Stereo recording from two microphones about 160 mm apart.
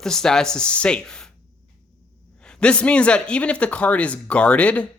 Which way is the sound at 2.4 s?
5° left (ahead or behind).